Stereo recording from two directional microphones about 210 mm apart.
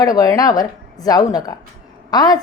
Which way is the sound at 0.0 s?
15° left (ahead or behind).